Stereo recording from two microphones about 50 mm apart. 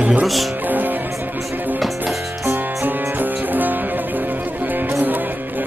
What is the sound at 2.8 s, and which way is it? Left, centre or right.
Music, right.